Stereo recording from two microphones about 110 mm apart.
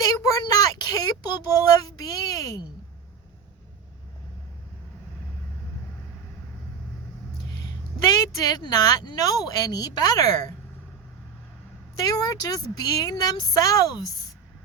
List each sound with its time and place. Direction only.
0.0 s child singing: 30° left (ahead or behind)
8.0 s speech: 30° left (ahead or behind)
12.0 s speech: 35° left (ahead or behind)